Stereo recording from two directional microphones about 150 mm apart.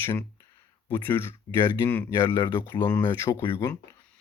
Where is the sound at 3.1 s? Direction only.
15° left (ahead or behind).